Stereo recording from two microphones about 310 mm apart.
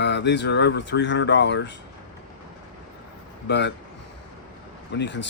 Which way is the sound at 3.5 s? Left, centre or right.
Left.